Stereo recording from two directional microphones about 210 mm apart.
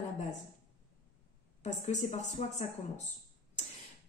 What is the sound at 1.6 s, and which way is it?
A woman's voice, 35° left (ahead or behind).